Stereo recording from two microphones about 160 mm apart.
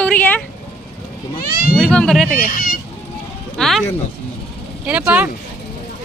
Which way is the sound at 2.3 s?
60° left (ahead or behind).